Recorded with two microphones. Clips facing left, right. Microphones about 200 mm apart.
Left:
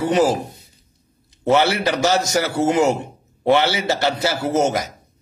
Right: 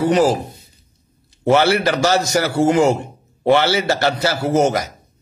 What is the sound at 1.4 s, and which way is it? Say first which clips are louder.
A man's voice: right 2 dB; 20° left (ahead or behind).